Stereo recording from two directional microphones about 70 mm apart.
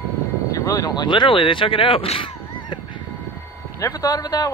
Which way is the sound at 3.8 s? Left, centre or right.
Left.